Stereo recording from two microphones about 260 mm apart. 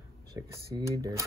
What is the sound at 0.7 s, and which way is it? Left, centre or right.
Speech, centre.